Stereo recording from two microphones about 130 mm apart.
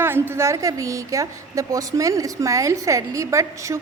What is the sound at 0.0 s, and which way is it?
A woman's voice, 15° right (ahead or behind).